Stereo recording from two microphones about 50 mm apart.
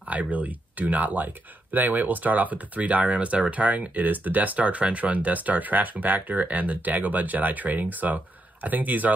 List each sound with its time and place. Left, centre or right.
0.1 s speech: right